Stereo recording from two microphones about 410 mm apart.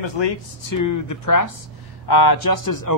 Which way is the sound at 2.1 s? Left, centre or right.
Left.